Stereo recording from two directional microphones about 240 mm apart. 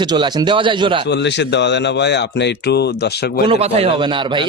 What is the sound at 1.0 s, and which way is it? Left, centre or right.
A man's voice, left.